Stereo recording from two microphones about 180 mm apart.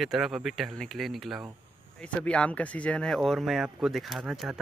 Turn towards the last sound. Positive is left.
turn(degrees=0)  # may be behind; listen again after turning